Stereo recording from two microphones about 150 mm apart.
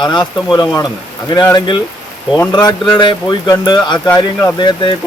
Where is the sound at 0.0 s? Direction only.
30° left (ahead or behind).